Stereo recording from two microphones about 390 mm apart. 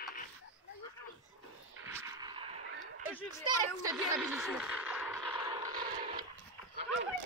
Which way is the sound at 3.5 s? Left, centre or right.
Centre.